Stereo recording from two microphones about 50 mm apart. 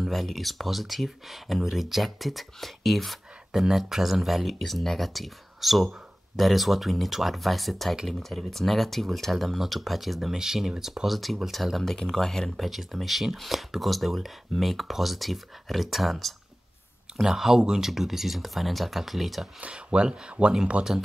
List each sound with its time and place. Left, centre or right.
0.0 s speech: centre
19.6 s speech: right
20.9 s speech: centre